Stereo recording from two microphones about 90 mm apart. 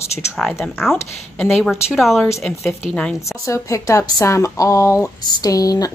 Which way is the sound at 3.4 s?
35° left (ahead or behind).